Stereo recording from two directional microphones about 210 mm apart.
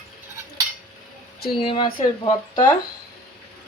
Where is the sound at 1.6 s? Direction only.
25° left (ahead or behind).